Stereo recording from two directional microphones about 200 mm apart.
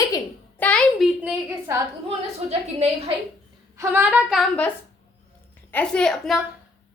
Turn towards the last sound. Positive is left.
turn(degrees=0)  # may be behind; listen again after turning